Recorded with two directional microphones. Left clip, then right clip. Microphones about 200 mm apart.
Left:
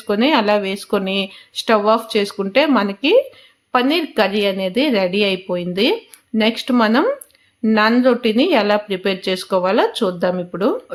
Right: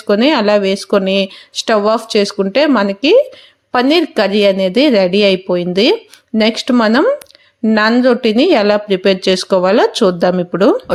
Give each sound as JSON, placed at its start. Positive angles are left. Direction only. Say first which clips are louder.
{"t": 0.1, "sound": "a woman's voice", "louder": "right 4 dB", "side_deg": -25}